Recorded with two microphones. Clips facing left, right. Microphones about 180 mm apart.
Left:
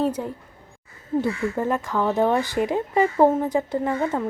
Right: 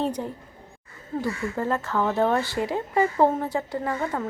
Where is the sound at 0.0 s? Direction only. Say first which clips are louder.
Left 3 dB; 5° left (ahead or behind).